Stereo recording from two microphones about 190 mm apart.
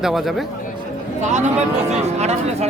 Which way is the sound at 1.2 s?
35° right (ahead or behind).